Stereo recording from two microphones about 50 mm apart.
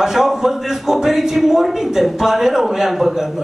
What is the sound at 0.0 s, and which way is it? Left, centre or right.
A man's voice, centre.